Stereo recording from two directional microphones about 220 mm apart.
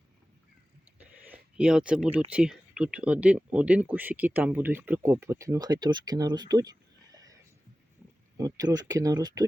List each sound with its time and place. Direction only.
0.9 s a sound: 5° right (ahead or behind)
2.3 s speech: 5° right (ahead or behind)
8.4 s speech: 15° right (ahead or behind)